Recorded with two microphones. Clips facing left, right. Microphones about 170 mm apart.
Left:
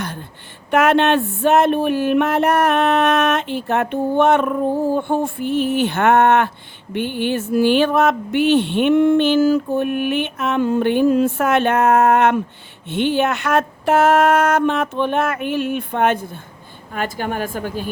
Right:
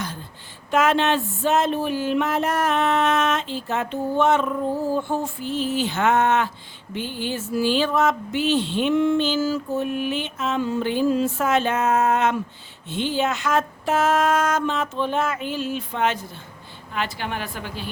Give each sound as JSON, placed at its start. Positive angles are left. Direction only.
{"t": 0.7, "sound": "a woman's voice", "side_deg": 60}